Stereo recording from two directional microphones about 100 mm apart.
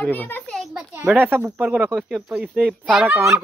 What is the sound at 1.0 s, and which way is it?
Speech, 20° right (ahead or behind).